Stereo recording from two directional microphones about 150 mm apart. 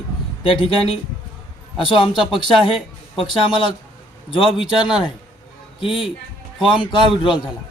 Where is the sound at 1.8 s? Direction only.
35° left (ahead or behind).